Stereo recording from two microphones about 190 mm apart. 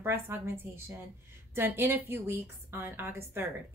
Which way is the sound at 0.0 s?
10° right (ahead or behind).